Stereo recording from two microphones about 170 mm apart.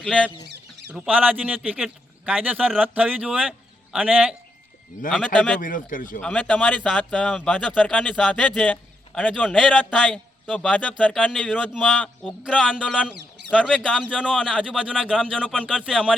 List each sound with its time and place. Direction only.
0.0 s speech: 5° left (ahead or behind)
0.9 s a man's voice: 10° right (ahead or behind)
5.0 s speech: 5° left (ahead or behind)
5.5 s speech: 50° left (ahead or behind)
6.1 s a man's voice: 5° left (ahead or behind)
10.9 s a man's voice: 5° right (ahead or behind)
13.8 s speech: 5° left (ahead or behind)
15.1 s speech: 5° left (ahead or behind)
15.5 s speech: 5° right (ahead or behind)